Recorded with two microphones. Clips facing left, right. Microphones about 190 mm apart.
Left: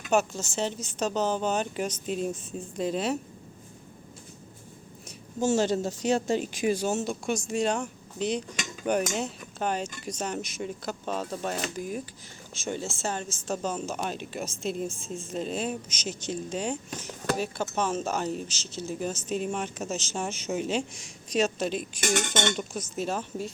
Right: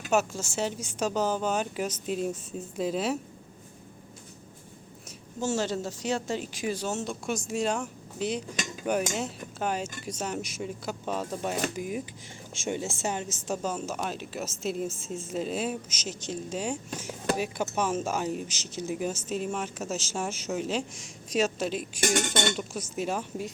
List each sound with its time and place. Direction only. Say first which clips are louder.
0.1 s speech: left 1 dB; 5° right (ahead or behind)
5.4 s speech: left 4 dB; 15° left (ahead or behind); by 23.5 s 10° right (ahead or behind)